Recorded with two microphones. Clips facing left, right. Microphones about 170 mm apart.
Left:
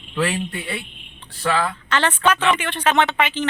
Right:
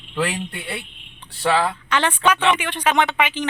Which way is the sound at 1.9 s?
10° right (ahead or behind).